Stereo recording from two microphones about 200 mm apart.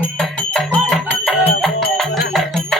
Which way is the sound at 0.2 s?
Centre (ahead or behind).